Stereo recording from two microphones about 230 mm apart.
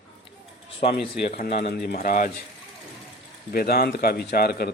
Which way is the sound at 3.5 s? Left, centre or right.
Left.